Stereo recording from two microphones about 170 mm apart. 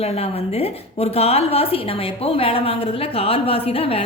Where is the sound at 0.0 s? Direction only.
35° left (ahead or behind).